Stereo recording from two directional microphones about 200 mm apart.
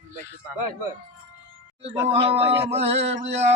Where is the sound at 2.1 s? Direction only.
30° right (ahead or behind).